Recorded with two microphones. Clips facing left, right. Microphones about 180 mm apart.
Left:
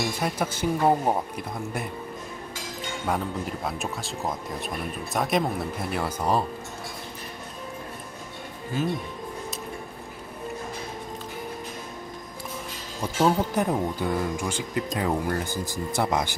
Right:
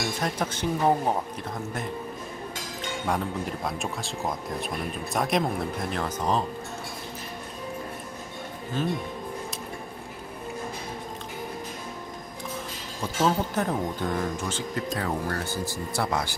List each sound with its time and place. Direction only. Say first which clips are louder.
0.2 s speech: left 1 dB; 10° left (ahead or behind)
3.1 s speech: left 1 dB; centre (ahead or behind)
8.8 s speech: left 1 dB; 10° left (ahead or behind)
13.2 s speech: left 2 dB; 15° left (ahead or behind)